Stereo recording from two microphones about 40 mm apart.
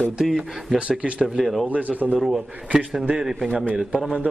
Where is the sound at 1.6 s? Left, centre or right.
Right.